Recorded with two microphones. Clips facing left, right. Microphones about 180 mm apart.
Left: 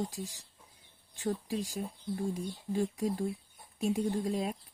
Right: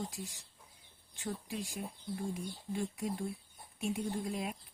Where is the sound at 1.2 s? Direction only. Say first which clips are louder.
Left 6 dB; 35° left (ahead or behind).